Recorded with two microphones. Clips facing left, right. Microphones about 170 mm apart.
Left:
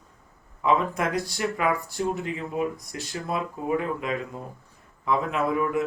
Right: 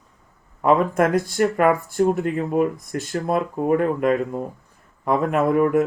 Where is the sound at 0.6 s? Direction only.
50° right (ahead or behind).